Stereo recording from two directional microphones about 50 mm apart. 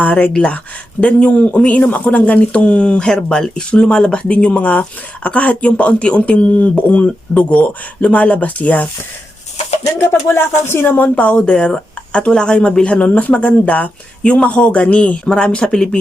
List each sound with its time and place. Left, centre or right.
0.0 s speech: left
10.1 s speech: left
11.1 s speech: left